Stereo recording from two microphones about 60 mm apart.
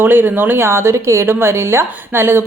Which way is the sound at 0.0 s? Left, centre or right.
Right.